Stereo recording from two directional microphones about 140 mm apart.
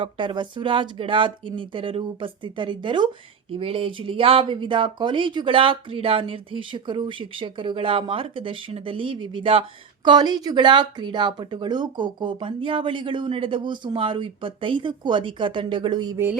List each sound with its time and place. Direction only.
0.0 s speech: 35° right (ahead or behind)